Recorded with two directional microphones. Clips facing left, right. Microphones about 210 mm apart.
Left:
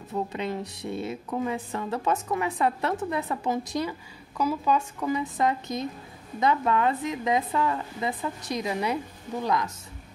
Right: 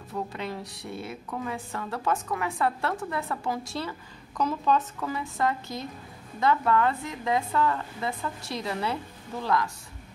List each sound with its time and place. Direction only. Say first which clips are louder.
0.1 s a woman's voice: left 4 dB; 20° left (ahead or behind)